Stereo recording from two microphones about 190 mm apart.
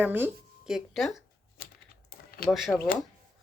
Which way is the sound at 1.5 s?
50° left (ahead or behind).